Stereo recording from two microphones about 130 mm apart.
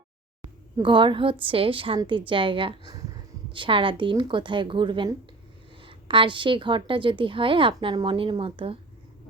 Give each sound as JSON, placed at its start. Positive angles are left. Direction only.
{"t": 0.8, "sound": "a woman's voice", "side_deg": -40}